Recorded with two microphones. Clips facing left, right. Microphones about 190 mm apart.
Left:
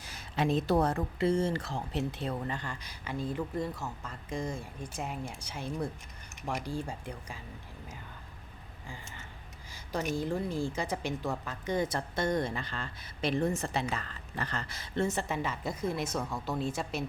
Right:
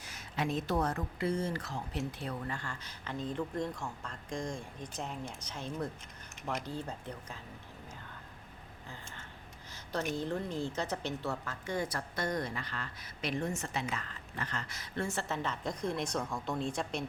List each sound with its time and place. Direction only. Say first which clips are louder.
0.0 s speech: left 4 dB; 30° left (ahead or behind); by 7.4 s 10° left (ahead or behind)
9.7 s a sound: left 2 dB; 10° left (ahead or behind)
10.2 s speech: left 3 dB; 10° left (ahead or behind)